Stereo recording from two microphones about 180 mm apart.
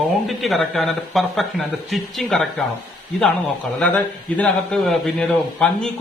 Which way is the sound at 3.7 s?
5° left (ahead or behind).